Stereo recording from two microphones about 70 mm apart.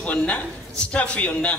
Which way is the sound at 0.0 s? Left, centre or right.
Centre.